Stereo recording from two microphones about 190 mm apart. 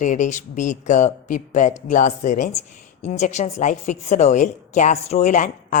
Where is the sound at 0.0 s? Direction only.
40° left (ahead or behind).